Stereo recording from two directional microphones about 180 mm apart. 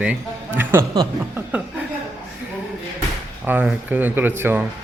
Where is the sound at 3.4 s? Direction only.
10° right (ahead or behind).